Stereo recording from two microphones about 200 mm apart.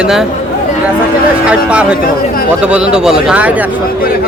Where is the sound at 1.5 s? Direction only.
5° right (ahead or behind).